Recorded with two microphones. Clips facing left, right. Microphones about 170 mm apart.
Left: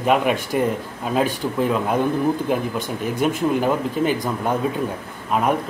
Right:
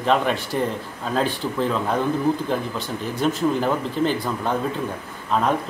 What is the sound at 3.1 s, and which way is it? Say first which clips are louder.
Speech: left 1 dB; 10° left (ahead or behind).